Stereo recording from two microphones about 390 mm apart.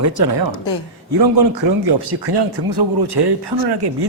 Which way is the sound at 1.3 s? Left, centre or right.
Right.